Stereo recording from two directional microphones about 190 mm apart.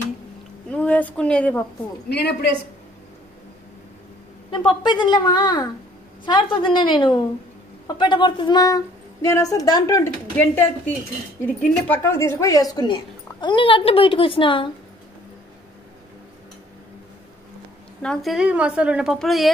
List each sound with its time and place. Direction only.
0.7 s a sound: 5° left (ahead or behind)
2.0 s a woman's voice: 60° left (ahead or behind)
4.5 s a woman's voice: 25° left (ahead or behind)
18.0 s a woman's voice: centre (ahead or behind)